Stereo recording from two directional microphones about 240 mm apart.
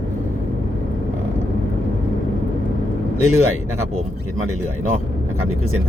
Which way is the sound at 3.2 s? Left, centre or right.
Left.